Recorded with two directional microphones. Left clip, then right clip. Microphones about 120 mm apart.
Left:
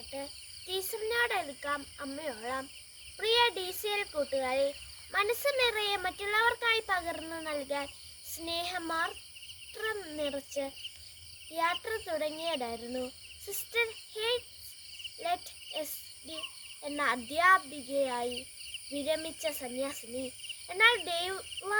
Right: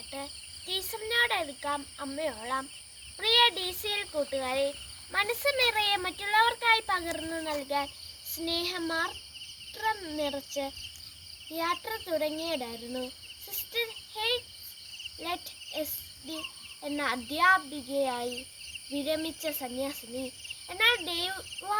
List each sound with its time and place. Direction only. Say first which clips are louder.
0.7 s a child's voice: right 2 dB; 20° left (ahead or behind)